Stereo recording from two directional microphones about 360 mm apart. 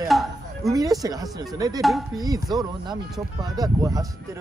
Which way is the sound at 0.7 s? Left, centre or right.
Centre.